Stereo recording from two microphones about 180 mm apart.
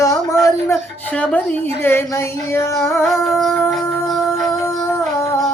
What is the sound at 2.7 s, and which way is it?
Music, centre (ahead or behind).